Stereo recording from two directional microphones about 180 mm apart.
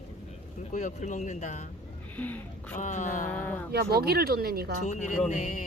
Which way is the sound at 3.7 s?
60° right (ahead or behind).